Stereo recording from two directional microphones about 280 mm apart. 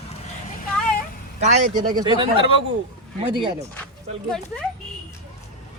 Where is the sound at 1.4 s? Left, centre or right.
Right.